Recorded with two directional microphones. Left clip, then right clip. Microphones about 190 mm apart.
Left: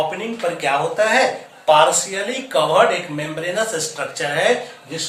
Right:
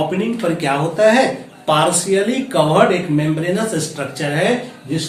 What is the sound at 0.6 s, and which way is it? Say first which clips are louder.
Speech: right 4 dB; 5° left (ahead or behind).